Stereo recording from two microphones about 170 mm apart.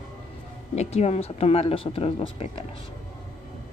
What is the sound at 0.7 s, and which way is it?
A woman's voice, 40° left (ahead or behind).